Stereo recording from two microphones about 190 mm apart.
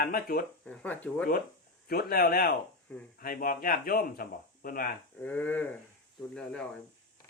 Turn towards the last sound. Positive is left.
turn(degrees=5)  # may be behind; listen again after turning